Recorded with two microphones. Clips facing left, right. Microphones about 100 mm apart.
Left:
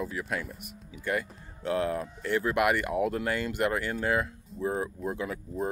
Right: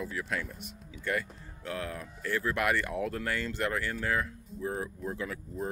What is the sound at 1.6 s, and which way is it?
Speech, 25° left (ahead or behind).